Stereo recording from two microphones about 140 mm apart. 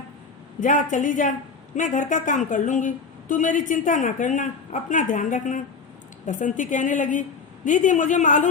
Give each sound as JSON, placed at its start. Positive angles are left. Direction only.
{"t": 0.6, "sound": "a woman's voice", "side_deg": 65}